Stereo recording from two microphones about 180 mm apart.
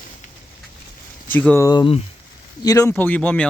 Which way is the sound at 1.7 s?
25° left (ahead or behind).